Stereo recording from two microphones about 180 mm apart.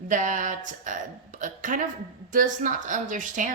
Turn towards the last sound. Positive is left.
turn(degrees=-45)  # may be behind; listen again after turning